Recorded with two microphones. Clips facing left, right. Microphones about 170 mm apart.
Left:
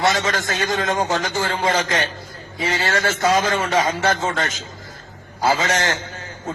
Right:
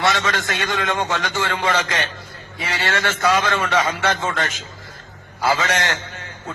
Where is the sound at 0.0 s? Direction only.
30° left (ahead or behind).